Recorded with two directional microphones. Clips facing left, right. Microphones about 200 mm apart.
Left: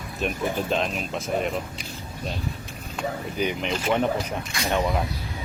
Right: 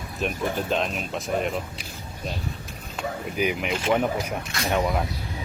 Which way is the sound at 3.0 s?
5° right (ahead or behind).